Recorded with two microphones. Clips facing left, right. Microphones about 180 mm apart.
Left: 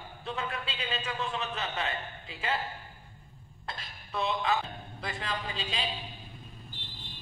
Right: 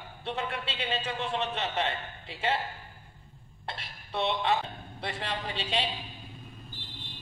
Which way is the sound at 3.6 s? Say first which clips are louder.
Right 2 dB; 30° right (ahead or behind).